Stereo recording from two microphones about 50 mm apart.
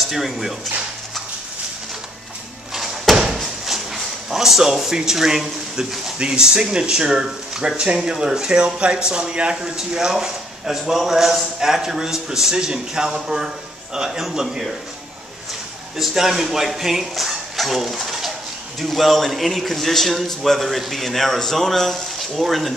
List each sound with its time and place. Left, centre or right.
0.1 s a man's voice: centre
2.7 s a sound: centre
6.1 s speech: centre
16.0 s a man's voice: centre